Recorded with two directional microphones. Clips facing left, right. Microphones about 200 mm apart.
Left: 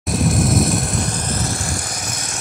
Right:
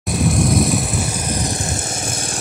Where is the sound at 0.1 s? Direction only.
Centre (ahead or behind).